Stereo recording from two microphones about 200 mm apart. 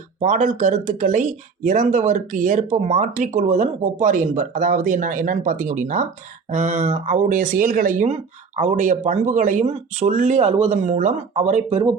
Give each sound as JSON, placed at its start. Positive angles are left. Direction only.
{"t": 0.2, "sound": "speech", "side_deg": -40}